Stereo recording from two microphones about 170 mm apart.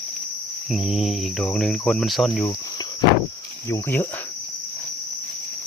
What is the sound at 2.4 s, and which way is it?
Speech, 20° left (ahead or behind).